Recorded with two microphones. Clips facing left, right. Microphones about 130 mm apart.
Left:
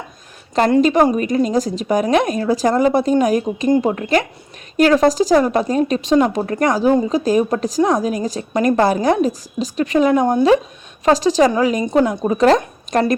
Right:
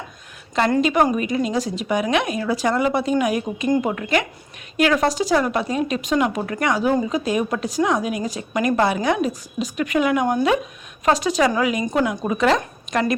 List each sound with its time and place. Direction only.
0.8 s a woman's voice: 35° left (ahead or behind)